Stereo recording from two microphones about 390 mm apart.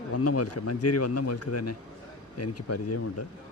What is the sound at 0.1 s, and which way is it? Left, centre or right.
Speech, left.